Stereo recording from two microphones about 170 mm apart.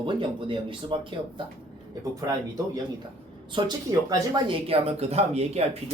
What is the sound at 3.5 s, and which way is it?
Speech, 25° right (ahead or behind).